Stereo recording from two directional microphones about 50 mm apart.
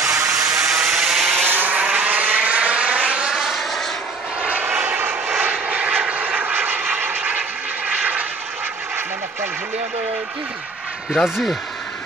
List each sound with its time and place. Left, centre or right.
0.0 s a sound: right
0.5 s a sound: centre
1.4 s vehicle: right
1.8 s vehicle: right
3.3 s vehicle: centre
4.4 s vehicle: right
4.7 s vehicle: right
5.4 s vehicle: right
11.2 s speech: centre